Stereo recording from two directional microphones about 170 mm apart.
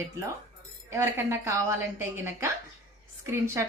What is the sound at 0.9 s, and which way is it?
Speech, 15° right (ahead or behind).